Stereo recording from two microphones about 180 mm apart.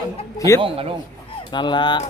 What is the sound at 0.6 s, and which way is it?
Speech, 30° right (ahead or behind).